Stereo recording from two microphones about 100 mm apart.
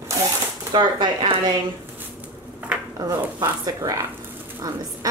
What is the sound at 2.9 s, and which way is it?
Speech, 35° right (ahead or behind).